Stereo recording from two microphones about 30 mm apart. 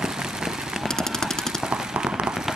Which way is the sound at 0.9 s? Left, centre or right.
Centre.